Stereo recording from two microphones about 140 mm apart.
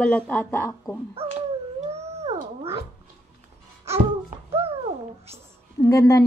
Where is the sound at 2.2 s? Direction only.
45° right (ahead or behind).